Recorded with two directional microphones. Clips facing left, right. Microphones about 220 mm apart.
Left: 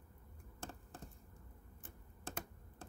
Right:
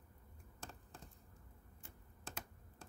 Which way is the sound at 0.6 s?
55° left (ahead or behind).